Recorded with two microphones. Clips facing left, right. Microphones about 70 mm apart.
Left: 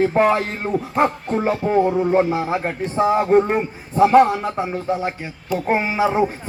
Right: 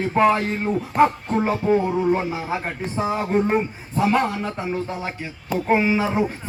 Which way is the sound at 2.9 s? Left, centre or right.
Centre.